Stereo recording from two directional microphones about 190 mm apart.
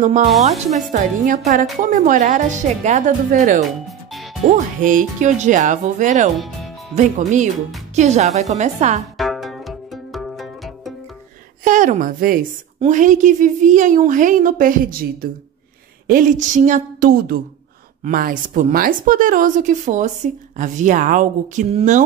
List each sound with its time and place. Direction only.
0.0 s a woman's voice: 40° right (ahead or behind)
4.8 s a woman's voice: 40° right (ahead or behind)
9.2 s music: centre (ahead or behind)
11.6 s a woman's voice: 45° right (ahead or behind)
16.1 s a woman's voice: 45° right (ahead or behind)